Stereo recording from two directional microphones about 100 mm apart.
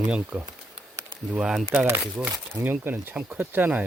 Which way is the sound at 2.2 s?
20° right (ahead or behind).